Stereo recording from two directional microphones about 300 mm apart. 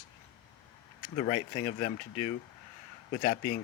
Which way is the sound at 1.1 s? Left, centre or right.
Left.